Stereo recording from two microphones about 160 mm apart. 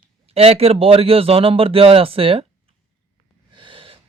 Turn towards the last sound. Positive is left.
turn(degrees=-35)  # may be behind; listen again after turning